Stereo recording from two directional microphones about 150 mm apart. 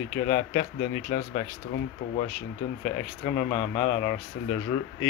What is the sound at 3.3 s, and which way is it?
Speech, 25° left (ahead or behind).